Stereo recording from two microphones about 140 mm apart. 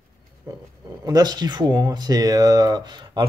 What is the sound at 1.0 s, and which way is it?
Speech, 30° right (ahead or behind).